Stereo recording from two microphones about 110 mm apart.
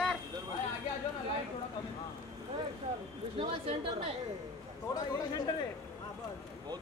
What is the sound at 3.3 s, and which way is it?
Speech, 55° right (ahead or behind).